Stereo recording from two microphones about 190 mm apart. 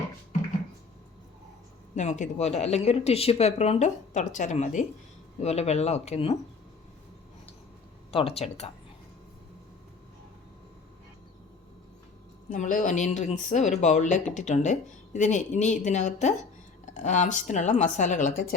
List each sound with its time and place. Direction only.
2.0 s a woman's voice: 40° left (ahead or behind)
8.1 s a woman's voice: 30° left (ahead or behind)
12.5 s a woman's voice: 45° left (ahead or behind)